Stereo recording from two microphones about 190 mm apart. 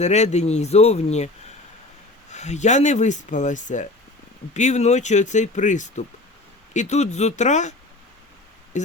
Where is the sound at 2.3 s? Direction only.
35° left (ahead or behind).